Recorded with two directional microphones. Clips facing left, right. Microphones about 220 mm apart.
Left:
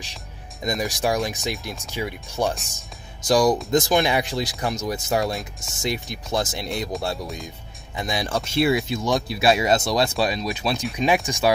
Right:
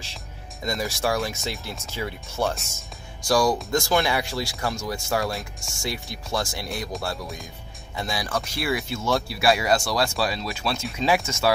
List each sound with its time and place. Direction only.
0.7 s speech: 15° left (ahead or behind)
2.7 s music: 20° left (ahead or behind)
3.7 s speech: 20° left (ahead or behind)
7.9 s speech: 20° left (ahead or behind)